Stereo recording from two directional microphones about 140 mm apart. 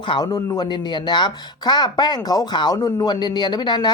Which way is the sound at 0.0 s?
30° left (ahead or behind).